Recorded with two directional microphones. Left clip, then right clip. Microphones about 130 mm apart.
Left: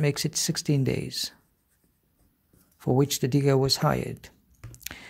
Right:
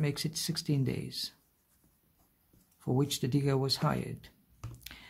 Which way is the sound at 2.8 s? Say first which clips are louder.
Left 8 dB; 45° left (ahead or behind).